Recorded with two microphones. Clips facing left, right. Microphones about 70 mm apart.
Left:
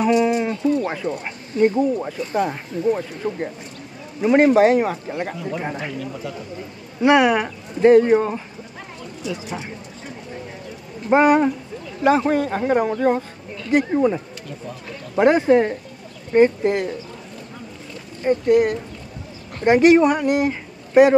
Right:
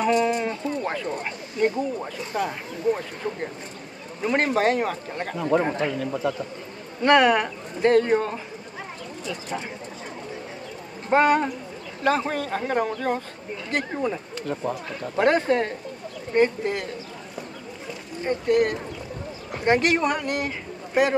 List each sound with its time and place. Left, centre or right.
0.0 s a sound: centre
2.0 s speech: centre
7.0 s speech: centre
11.1 s speech: centre
18.2 s speech: centre